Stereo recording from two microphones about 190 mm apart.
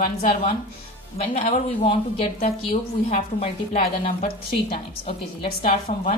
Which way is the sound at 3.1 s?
35° left (ahead or behind).